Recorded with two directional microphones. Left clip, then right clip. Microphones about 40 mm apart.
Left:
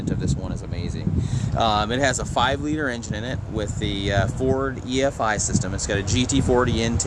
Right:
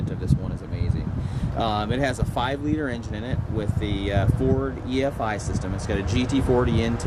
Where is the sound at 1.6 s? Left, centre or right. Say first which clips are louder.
Left 4 dB; left.